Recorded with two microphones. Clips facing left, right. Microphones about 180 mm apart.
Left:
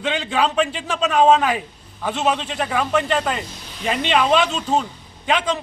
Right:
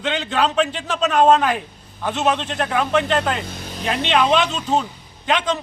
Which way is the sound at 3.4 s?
50° right (ahead or behind).